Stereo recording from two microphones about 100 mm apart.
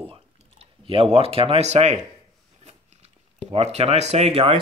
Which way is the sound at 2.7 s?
90° right.